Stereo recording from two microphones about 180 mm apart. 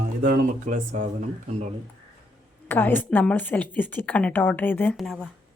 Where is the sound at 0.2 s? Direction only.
55° right (ahead or behind); by 1.7 s 40° right (ahead or behind).